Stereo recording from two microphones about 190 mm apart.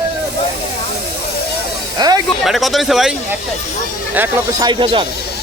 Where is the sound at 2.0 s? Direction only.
20° right (ahead or behind).